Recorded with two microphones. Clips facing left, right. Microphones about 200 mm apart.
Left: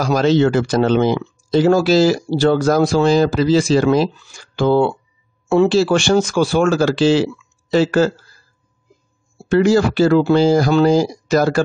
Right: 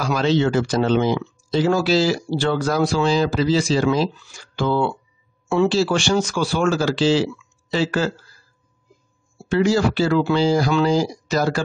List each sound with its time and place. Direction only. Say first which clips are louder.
0.0 s speech: left 5 dB; 45° left (ahead or behind)
4.6 s speech: left 6 dB; 45° left (ahead or behind)
9.5 s speech: left 4 dB; 50° left (ahead or behind)